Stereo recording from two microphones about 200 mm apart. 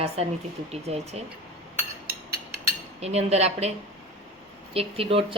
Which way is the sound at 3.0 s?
30° right (ahead or behind).